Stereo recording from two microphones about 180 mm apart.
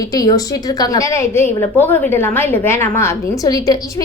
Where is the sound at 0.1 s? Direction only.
20° left (ahead or behind).